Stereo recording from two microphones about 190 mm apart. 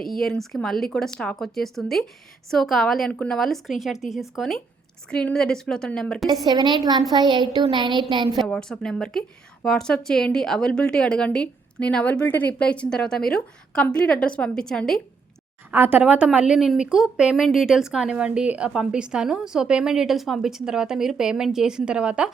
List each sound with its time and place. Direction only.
0.1 s a woman's voice: centre (ahead or behind)
6.4 s speech: 20° right (ahead or behind)
8.3 s a woman's voice: centre (ahead or behind)
15.7 s a woman's voice: 10° right (ahead or behind)